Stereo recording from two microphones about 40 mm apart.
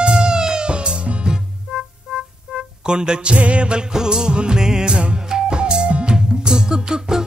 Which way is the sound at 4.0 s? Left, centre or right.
Centre.